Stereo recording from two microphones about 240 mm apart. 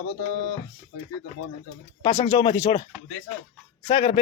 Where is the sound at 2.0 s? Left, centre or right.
Left.